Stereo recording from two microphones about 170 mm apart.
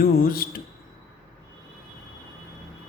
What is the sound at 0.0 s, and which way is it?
Speech, 60° left (ahead or behind).